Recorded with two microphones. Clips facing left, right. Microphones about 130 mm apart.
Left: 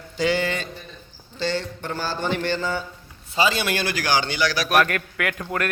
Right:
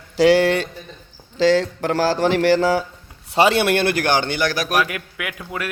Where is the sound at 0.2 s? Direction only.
75° right (ahead or behind).